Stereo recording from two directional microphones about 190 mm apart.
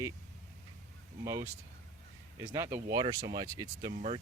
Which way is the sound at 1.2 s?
15° right (ahead or behind).